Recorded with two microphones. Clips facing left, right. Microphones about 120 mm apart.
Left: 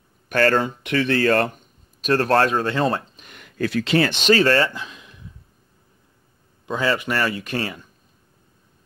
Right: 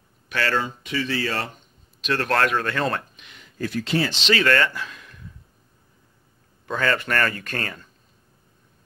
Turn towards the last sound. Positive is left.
turn(degrees=15)  # may be behind; listen again after turning